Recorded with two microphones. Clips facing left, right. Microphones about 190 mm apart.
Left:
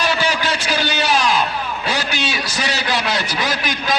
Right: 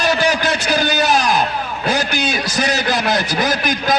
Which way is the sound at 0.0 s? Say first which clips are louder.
Right 3 dB; 40° right (ahead or behind).